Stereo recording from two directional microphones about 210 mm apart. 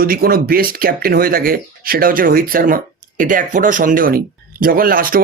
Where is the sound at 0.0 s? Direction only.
45° right (ahead or behind).